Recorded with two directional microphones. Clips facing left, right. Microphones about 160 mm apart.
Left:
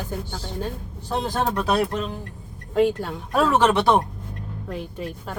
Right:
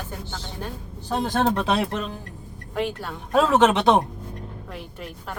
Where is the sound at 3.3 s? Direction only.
20° right (ahead or behind).